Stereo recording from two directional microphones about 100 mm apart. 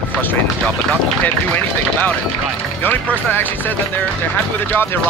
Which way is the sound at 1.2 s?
15° left (ahead or behind).